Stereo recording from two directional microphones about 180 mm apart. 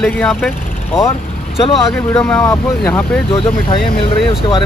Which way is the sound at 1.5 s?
Centre (ahead or behind).